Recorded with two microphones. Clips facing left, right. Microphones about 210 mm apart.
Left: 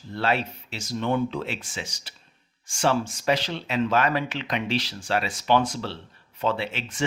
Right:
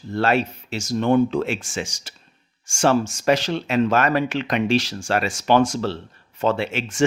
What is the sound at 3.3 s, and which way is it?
Speech, 45° right (ahead or behind).